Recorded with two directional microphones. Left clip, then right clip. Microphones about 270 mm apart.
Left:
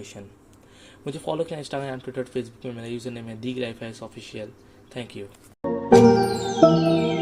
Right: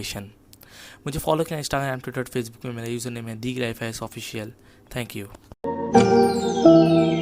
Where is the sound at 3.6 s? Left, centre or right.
Right.